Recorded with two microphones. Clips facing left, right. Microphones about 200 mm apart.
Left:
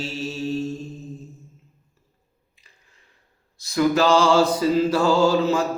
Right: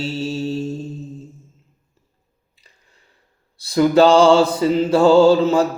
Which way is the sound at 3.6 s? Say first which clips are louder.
Right 6 dB; 30° right (ahead or behind).